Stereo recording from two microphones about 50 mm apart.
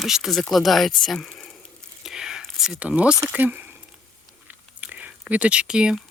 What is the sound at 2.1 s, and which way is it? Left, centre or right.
Whispering, centre.